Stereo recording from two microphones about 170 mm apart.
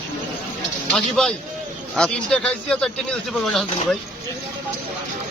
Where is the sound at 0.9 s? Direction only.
5° left (ahead or behind).